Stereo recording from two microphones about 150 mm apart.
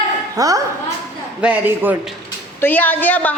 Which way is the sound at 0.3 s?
25° right (ahead or behind).